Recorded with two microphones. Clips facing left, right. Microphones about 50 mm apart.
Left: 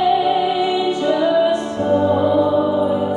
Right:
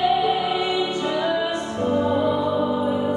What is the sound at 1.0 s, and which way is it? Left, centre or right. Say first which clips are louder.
Music: left 7 dB; centre.